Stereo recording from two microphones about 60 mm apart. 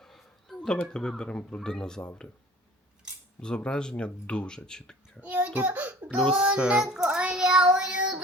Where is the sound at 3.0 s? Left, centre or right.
Centre.